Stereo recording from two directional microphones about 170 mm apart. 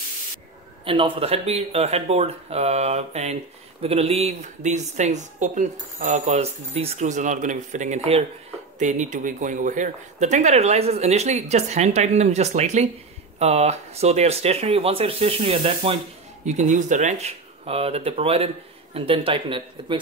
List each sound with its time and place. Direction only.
0.8 s speech: 30° right (ahead or behind)